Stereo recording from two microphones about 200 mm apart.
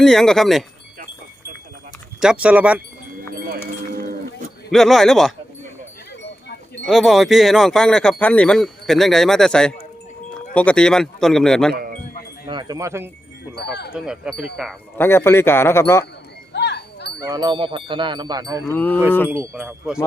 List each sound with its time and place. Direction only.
0.0 s speech: 5° left (ahead or behind)
2.2 s speech: 5° right (ahead or behind)
4.7 s speech: centre (ahead or behind)
6.8 s speech: centre (ahead or behind)
11.7 s speech: 50° right (ahead or behind)
12.5 s speech: 20° right (ahead or behind)
14.0 s speech: centre (ahead or behind)
14.9 s speech: 10° left (ahead or behind)
16.5 s a sound: 55° left (ahead or behind)
17.2 s speech: 20° right (ahead or behind)
18.7 s speech: 10° left (ahead or behind)
19.3 s speech: 10° right (ahead or behind)